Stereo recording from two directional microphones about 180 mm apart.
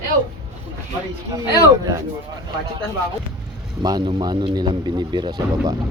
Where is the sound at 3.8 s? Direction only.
20° right (ahead or behind).